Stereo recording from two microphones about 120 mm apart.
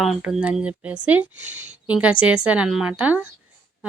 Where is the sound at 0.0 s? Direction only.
Centre (ahead or behind).